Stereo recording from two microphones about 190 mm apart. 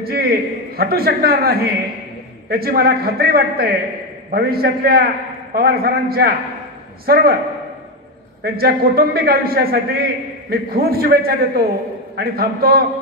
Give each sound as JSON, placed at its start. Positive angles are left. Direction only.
{"t": 0.0, "sound": "a man's voice", "side_deg": -55}
{"t": 8.4, "sound": "a man's voice", "side_deg": -55}